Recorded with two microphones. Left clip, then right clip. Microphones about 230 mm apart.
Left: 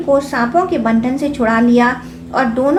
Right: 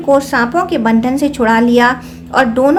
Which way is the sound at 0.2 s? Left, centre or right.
Right.